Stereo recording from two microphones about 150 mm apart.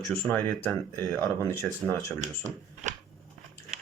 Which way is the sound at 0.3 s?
15° left (ahead or behind).